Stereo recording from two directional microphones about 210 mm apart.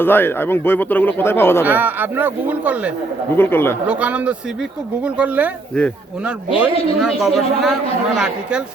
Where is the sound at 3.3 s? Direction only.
10° left (ahead or behind).